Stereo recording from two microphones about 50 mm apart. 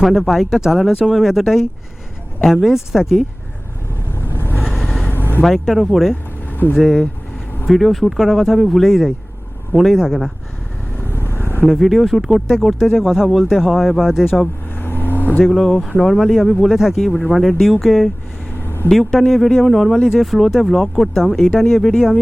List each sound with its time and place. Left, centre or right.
0.0 s speech: centre
4.1 s vehicle: left
4.6 s vehicle: centre
5.0 s vehicle: left
5.4 s speech: centre
6.5 s vehicle: left
6.7 s speech: centre
10.9 s vehicle: left
11.8 s speech: centre
14.8 s vehicle: left
15.4 s speech: centre
18.5 s vehicle: left
18.9 s speech: centre